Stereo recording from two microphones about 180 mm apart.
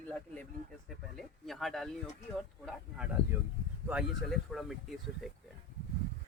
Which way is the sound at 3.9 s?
Centre (ahead or behind).